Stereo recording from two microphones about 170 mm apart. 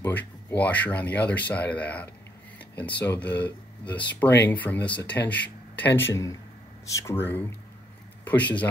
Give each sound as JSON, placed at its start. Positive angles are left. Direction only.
{"t": 0.0, "sound": "speech", "side_deg": 10}